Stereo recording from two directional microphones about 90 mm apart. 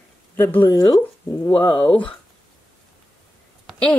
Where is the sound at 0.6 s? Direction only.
45° left (ahead or behind).